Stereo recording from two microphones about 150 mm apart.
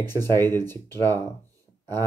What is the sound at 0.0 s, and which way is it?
Speech, 15° left (ahead or behind).